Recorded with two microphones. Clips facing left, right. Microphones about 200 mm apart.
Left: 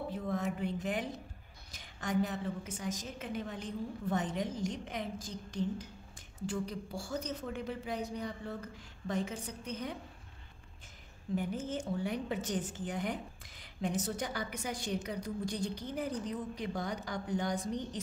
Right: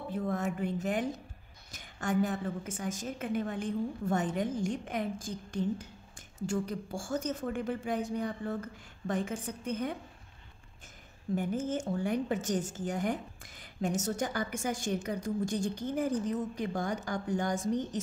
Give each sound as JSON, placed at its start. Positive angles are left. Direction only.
{"t": 0.1, "sound": "a woman's voice", "side_deg": -50}
{"t": 11.3, "sound": "a woman's voice", "side_deg": -50}